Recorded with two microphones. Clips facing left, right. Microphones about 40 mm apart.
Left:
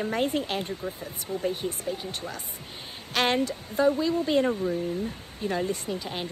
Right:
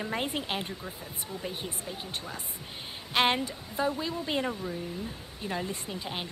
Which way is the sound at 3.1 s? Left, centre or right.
Centre.